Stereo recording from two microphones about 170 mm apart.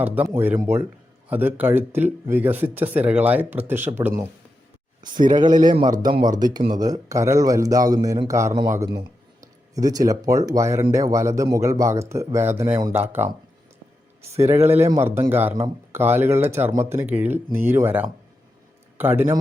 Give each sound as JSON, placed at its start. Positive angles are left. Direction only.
{"t": 0.0, "sound": "speech", "side_deg": -10}
{"t": 4.9, "sound": "a sound", "side_deg": -25}
{"t": 5.5, "sound": "a man's voice", "side_deg": -50}
{"t": 5.7, "sound": "speech", "side_deg": -25}